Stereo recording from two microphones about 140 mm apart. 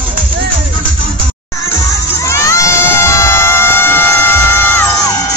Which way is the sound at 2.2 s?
20° left (ahead or behind).